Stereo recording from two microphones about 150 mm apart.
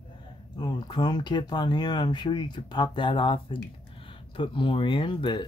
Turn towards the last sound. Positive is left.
turn(degrees=35)  # may be behind; listen again after turning